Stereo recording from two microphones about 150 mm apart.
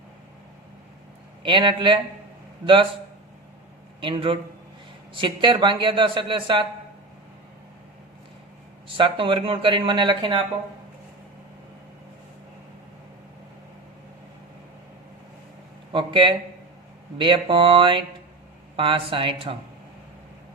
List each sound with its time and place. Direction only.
1.4 s a man's voice: 35° right (ahead or behind)
4.0 s a man's voice: 35° right (ahead or behind)
8.9 s a man's voice: 35° right (ahead or behind)
15.9 s a man's voice: 35° right (ahead or behind)